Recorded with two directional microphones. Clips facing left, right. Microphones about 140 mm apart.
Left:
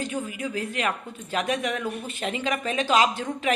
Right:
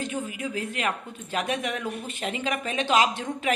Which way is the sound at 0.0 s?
35° left (ahead or behind).